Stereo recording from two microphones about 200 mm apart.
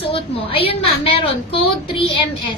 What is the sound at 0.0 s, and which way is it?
A woman's voice, 30° left (ahead or behind).